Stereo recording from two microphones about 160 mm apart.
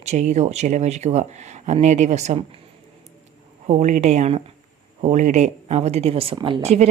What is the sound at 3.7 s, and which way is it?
Speech, 50° right (ahead or behind).